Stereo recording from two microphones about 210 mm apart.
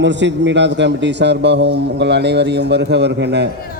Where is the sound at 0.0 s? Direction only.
55° right (ahead or behind).